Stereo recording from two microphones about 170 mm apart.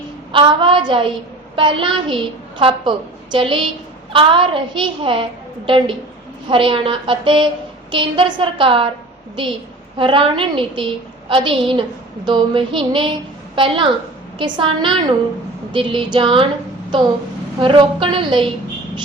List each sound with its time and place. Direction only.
0.3 s a woman's voice: 30° right (ahead or behind)
10.0 s a woman's voice: 30° right (ahead or behind)
17.6 s a woman's voice: 30° right (ahead or behind)